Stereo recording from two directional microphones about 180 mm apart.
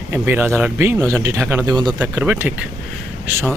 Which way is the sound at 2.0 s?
10° right (ahead or behind).